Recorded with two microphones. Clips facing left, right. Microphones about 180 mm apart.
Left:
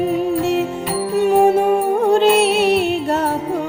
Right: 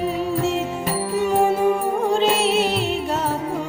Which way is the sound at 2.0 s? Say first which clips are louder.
Left 7 dB; 60° left (ahead or behind).